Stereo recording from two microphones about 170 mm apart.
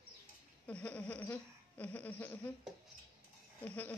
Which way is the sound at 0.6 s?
5° left (ahead or behind).